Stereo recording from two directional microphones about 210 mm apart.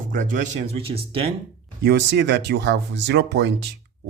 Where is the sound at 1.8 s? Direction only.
55° right (ahead or behind).